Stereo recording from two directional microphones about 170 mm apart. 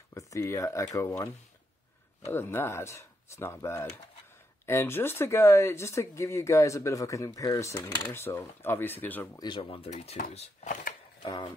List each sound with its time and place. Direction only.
0.3 s speech: 20° left (ahead or behind)
9.4 s speech: 30° left (ahead or behind); by 11.0 s 50° left (ahead or behind)
11.2 s speech: 25° left (ahead or behind)